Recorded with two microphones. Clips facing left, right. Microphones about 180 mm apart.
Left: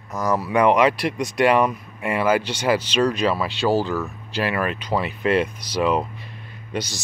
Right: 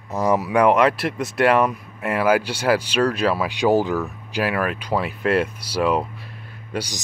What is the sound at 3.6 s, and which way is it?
Speech, 15° right (ahead or behind).